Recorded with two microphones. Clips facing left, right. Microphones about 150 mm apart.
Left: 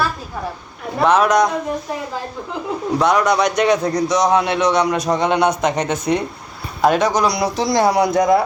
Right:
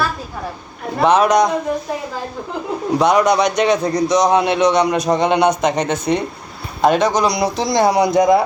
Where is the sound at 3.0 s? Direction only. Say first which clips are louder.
Right 2 dB; centre (ahead or behind).